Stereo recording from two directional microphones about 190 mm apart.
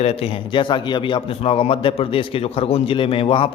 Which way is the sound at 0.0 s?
30° left (ahead or behind).